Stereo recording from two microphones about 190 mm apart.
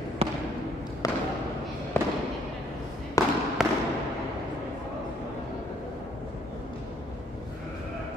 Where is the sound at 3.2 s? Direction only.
15° left (ahead or behind).